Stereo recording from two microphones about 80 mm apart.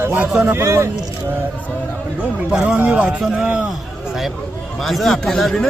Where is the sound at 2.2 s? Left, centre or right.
Centre.